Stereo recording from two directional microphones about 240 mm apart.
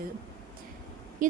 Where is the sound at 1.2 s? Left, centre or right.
Right.